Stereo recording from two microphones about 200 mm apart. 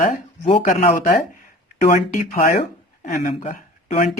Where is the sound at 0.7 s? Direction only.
40° left (ahead or behind).